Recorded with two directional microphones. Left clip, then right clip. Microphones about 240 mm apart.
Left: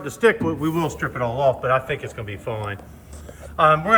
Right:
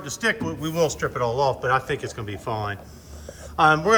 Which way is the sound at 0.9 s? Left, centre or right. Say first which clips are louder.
Even; centre.